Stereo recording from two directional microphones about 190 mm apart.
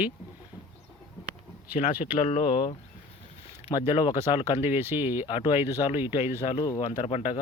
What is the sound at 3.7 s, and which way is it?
Speech, 25° left (ahead or behind).